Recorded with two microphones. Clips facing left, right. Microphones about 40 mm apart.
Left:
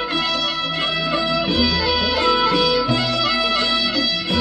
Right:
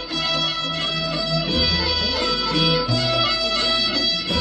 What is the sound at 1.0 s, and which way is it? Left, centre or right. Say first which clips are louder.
Music: left 4 dB; left.